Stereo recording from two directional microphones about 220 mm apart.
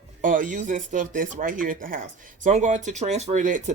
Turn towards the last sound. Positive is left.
turn(degrees=-35)  # may be behind; listen again after turning